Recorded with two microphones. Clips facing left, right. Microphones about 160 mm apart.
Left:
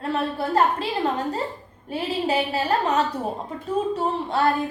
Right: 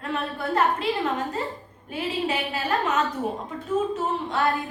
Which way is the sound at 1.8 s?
30° left (ahead or behind).